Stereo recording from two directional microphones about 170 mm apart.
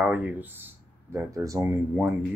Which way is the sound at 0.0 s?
10° right (ahead or behind).